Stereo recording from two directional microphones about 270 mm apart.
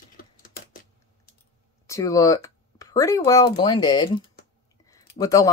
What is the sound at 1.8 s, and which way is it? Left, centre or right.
Speech, centre.